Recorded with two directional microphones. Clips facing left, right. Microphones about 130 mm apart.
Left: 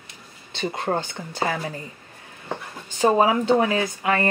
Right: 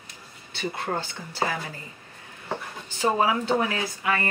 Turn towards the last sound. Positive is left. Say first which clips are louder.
# left 5 dB
turn(degrees=25)  # may be behind; listen again after turning